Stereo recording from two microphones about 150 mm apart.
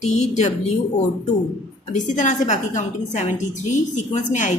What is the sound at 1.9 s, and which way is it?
A woman's voice, 55° left (ahead or behind).